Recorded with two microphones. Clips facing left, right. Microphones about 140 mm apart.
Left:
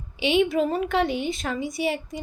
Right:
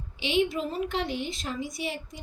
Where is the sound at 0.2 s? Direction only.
65° left (ahead or behind).